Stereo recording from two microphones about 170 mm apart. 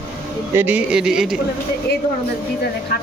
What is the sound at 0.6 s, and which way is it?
Speech, 10° right (ahead or behind).